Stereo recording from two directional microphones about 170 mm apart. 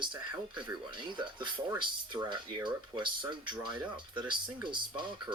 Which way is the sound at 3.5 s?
5° right (ahead or behind).